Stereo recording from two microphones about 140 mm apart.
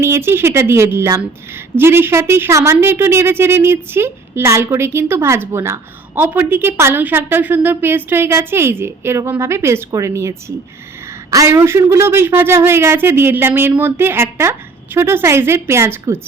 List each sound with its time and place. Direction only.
0.0 s a woman's voice: 15° right (ahead or behind)